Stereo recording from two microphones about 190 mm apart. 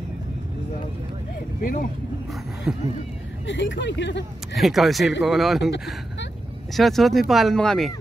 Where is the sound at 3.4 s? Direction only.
75° left (ahead or behind).